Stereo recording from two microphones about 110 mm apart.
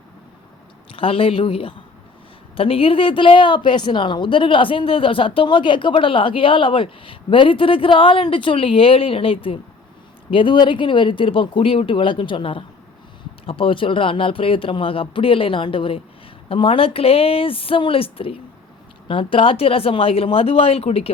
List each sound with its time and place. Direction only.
0.9 s speech: 55° left (ahead or behind)